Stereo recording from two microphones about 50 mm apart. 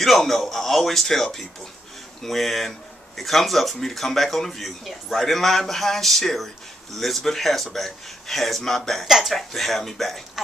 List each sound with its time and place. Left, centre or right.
0.0 s speech: centre
9.0 s speech: centre